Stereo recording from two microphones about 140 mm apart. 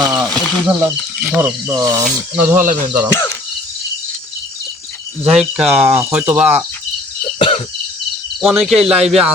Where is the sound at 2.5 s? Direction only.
70° right (ahead or behind).